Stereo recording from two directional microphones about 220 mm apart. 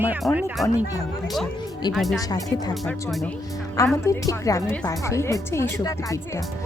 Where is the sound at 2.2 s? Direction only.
15° left (ahead or behind).